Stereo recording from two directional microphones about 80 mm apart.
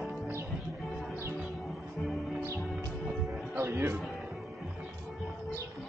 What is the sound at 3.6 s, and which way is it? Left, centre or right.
Music, right.